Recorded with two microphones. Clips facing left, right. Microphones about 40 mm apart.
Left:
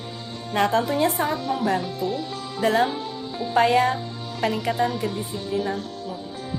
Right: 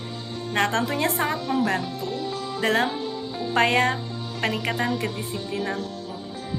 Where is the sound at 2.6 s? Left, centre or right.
Right.